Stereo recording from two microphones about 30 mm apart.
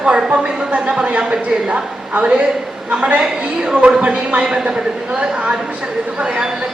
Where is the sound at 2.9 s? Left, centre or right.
Right.